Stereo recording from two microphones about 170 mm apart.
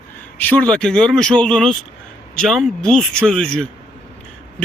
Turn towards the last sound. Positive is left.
turn(degrees=5)  # may be behind; listen again after turning